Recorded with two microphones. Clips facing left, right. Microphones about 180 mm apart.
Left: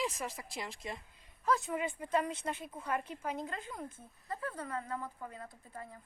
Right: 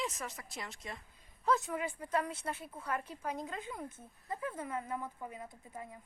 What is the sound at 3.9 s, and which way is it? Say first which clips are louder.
Speech: even; 15° right (ahead or behind).